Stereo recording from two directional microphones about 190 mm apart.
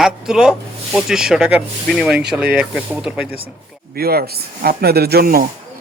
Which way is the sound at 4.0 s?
55° right (ahead or behind).